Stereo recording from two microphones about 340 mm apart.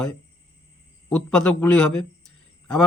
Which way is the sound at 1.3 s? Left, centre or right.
Left.